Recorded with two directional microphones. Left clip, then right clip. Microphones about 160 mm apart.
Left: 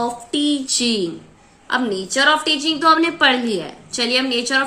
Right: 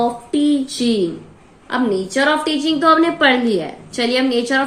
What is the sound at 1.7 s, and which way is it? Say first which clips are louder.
A woman's voice: right 2 dB; 25° left (ahead or behind).